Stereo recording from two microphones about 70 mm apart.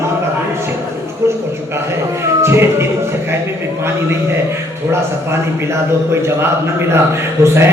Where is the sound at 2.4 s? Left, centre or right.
Right.